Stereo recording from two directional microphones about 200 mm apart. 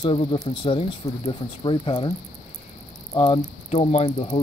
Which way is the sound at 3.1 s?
30° left (ahead or behind).